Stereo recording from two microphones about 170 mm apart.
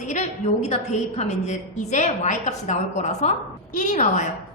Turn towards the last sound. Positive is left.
turn(degrees=45)  # may be behind; listen again after turning